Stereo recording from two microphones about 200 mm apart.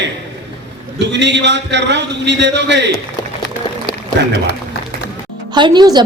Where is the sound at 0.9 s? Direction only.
60° right (ahead or behind).